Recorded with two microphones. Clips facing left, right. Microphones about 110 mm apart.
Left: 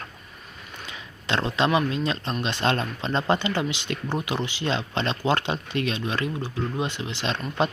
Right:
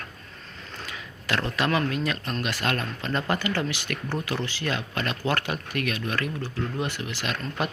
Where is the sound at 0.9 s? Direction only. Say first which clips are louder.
Left 2 dB; 20° left (ahead or behind).